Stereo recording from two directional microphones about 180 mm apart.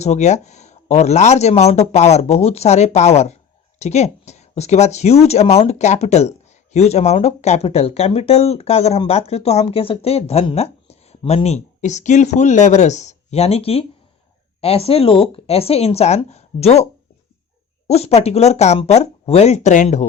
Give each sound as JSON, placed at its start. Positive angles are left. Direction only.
{"t": 0.0, "sound": "speech", "side_deg": 40}
{"t": 17.8, "sound": "speech", "side_deg": 35}